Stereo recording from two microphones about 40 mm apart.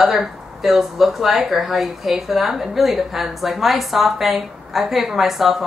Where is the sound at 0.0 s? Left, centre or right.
Centre.